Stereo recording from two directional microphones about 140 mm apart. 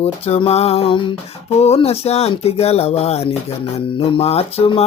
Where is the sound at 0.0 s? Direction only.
45° left (ahead or behind).